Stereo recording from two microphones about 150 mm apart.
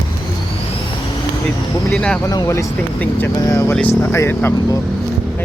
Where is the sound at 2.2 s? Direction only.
25° left (ahead or behind).